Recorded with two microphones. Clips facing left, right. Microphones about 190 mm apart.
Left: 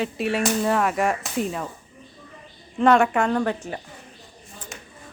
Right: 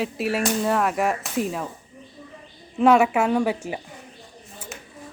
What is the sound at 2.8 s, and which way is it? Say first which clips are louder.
A woman's voice: right 1 dB; 5° right (ahead or behind).